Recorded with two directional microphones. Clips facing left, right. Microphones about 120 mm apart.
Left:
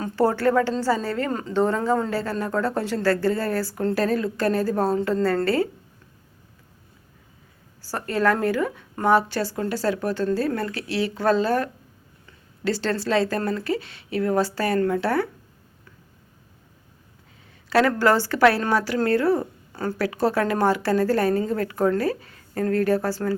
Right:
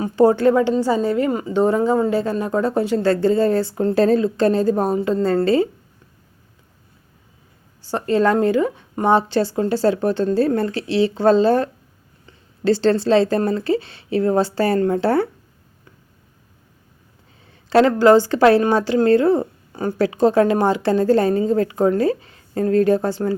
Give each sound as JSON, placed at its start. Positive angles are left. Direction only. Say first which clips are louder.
{"t": 0.0, "sound": "a woman's voice", "louder": "right 6 dB", "side_deg": -20}
{"t": 7.8, "sound": "a woman's voice", "louder": "right 6 dB", "side_deg": -20}
{"t": 17.7, "sound": "a woman's voice", "louder": "right 6 dB", "side_deg": -25}